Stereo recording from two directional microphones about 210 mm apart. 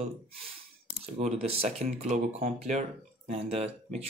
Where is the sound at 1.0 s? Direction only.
30° right (ahead or behind).